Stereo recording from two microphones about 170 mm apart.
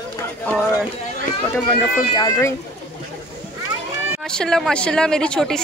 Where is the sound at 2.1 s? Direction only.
15° left (ahead or behind).